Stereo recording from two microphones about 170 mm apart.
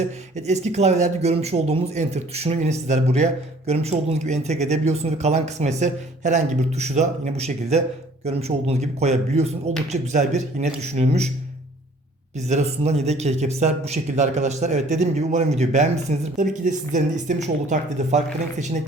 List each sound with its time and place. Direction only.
0.0 s a man's voice: 40° right (ahead or behind)
12.5 s a man's voice: 40° right (ahead or behind)